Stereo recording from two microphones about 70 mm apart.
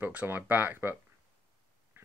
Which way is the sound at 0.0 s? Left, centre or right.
Right.